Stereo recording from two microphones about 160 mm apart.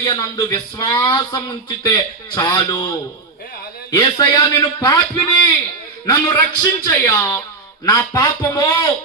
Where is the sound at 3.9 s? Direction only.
25° left (ahead or behind).